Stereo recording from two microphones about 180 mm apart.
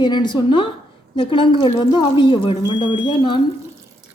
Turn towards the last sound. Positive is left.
turn(degrees=25)  # may be behind; listen again after turning